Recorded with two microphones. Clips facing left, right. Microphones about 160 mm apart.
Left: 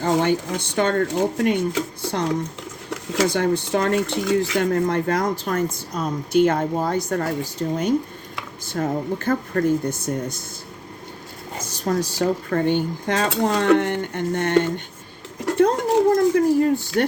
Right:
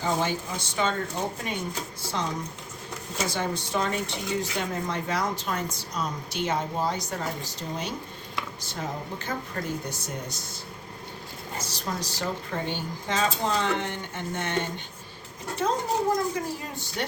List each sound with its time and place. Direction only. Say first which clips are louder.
0.0 s speech: left 8 dB; 65° left (ahead or behind)
2.9 s speech: left 10 dB; 90° left; by 10.4 s 50° left (ahead or behind)
11.6 s a sound: left 11 dB; 50° left (ahead or behind)
12.2 s speech: left 10 dB; 55° left (ahead or behind)
13.2 s speech: left 8 dB; 70° left (ahead or behind); by 17.1 s 55° left (ahead or behind)